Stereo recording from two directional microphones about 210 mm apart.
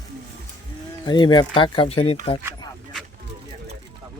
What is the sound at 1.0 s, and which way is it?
Speech, 20° left (ahead or behind).